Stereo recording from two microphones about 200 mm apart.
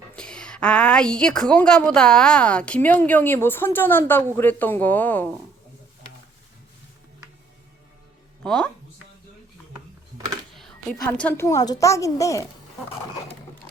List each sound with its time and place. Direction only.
0.2 s a woman's voice: 5° left (ahead or behind)
8.4 s a woman's voice: 5° left (ahead or behind)
10.5 s a sound: centre (ahead or behind)
11.0 s a woman's voice: 5° left (ahead or behind)